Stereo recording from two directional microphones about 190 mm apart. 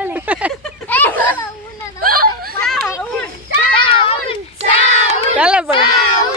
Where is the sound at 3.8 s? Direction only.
30° left (ahead or behind).